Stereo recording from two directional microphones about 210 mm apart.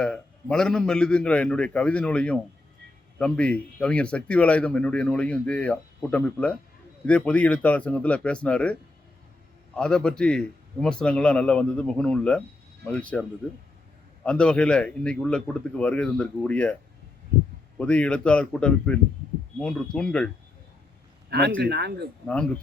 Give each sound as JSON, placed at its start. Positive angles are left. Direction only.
{"t": 0.0, "sound": "speech", "side_deg": 5}
{"t": 14.3, "sound": "speech", "side_deg": 5}
{"t": 17.7, "sound": "speech", "side_deg": 5}
{"t": 21.2, "sound": "a sound", "side_deg": -50}
{"t": 21.6, "sound": "speech", "side_deg": -50}